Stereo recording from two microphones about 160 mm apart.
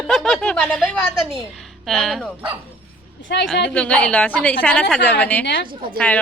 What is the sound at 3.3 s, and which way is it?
Speech, 90° left.